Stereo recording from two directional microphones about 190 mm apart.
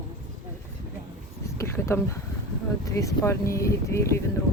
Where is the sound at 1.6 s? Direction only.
15° left (ahead or behind).